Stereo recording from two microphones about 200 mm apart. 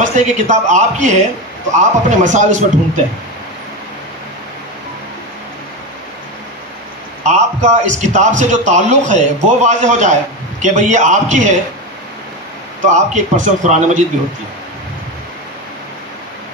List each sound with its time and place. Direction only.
0.0 s a man's voice: 40° right (ahead or behind)
7.2 s a man's voice: 35° right (ahead or behind)
12.8 s a man's voice: 35° right (ahead or behind)